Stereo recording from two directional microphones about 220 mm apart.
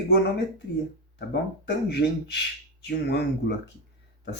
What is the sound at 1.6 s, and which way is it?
Speech, 50° left (ahead or behind).